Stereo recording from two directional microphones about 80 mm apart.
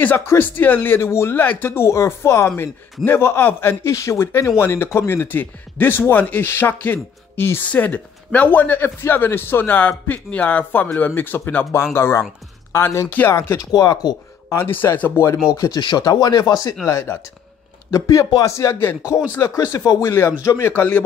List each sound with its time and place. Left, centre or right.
0.3 s speech: left
7.6 s speech: centre; by 13.1 s left
13.6 s speech: left
14.5 s speech: left
15.7 s speech: left
16.8 s speech: left